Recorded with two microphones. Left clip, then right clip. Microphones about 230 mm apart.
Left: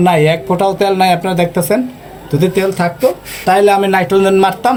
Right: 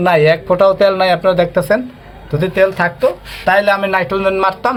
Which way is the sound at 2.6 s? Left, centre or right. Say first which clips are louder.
Right 4 dB; right.